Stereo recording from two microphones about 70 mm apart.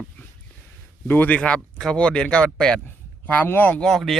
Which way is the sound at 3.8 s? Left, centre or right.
Centre.